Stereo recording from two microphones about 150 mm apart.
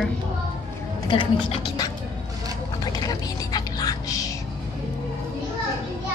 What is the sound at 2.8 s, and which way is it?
Music, 25° left (ahead or behind).